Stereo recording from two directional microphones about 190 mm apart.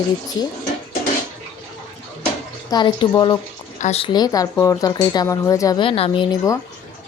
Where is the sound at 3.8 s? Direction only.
30° left (ahead or behind).